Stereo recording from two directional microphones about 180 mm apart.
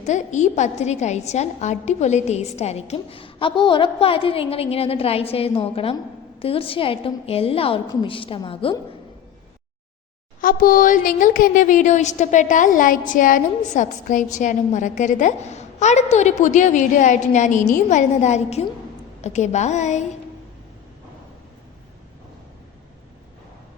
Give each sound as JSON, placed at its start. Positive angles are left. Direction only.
{"t": 0.0, "sound": "a woman's voice", "side_deg": 40}
{"t": 10.4, "sound": "a woman's voice", "side_deg": 50}